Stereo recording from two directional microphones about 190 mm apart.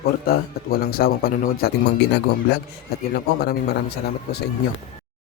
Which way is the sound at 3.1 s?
55° left (ahead or behind).